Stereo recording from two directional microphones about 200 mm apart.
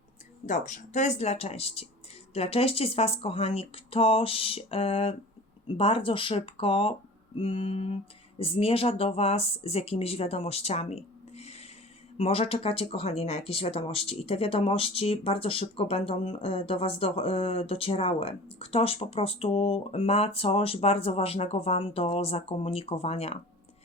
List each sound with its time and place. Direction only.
0.4 s speech: 35° left (ahead or behind)